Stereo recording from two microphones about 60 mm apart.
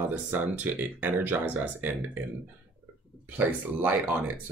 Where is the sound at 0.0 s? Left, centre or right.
Right.